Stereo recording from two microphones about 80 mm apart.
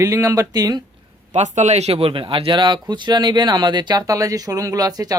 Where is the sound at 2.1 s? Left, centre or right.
Right.